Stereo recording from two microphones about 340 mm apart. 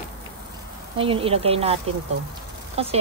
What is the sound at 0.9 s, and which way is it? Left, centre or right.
A woman's voice, centre.